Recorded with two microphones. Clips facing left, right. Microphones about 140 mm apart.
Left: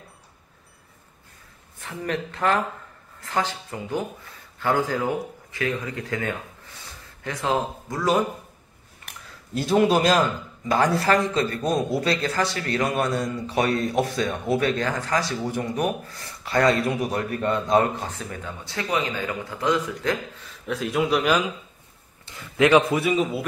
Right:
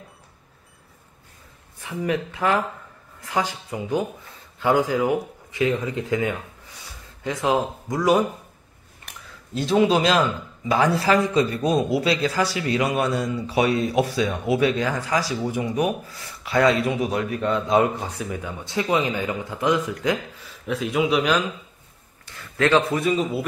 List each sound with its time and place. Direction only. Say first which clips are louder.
1.8 s speech: right 3 dB; 10° right (ahead or behind)
9.0 s speech: right 1 dB; centre (ahead or behind); by 20.2 s 15° right (ahead or behind)
20.6 s speech: right 2 dB; centre (ahead or behind)
22.3 s a sound: left 1 dB; 25° left (ahead or behind)
22.6 s speech: left 2 dB; 15° left (ahead or behind)